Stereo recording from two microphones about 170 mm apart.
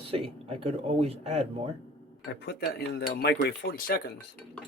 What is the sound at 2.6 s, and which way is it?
Speech, 70° left (ahead or behind).